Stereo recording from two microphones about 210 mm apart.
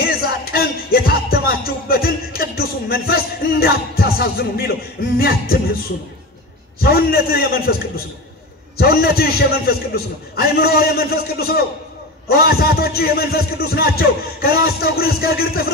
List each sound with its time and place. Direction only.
0.0 s music: 45° left (ahead or behind)
6.8 s a man's voice: 45° left (ahead or behind)
8.7 s a man's voice: 45° left (ahead or behind)